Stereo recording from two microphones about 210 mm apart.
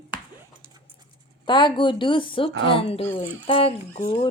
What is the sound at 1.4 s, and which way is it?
Speech, 20° left (ahead or behind).